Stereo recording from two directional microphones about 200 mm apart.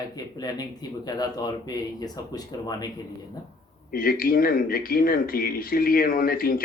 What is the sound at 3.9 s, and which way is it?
Speech, 45° left (ahead or behind).